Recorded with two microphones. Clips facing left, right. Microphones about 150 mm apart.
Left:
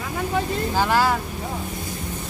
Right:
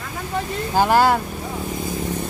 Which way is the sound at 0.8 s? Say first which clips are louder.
Right 5 dB; 50° right (ahead or behind).